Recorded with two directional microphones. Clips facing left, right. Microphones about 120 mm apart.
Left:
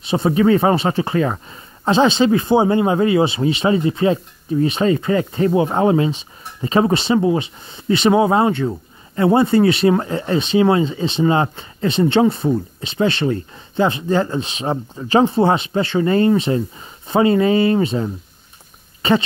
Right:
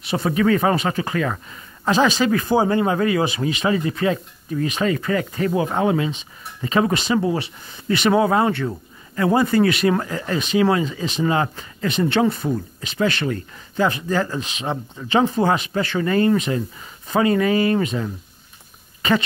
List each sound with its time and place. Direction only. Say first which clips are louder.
0.0 s speech: left 4 dB; 25° left (ahead or behind)